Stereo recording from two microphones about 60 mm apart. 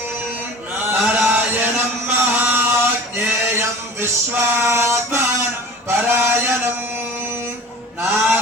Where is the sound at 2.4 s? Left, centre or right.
Right.